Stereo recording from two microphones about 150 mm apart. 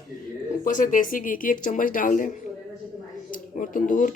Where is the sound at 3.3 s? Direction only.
60° left (ahead or behind).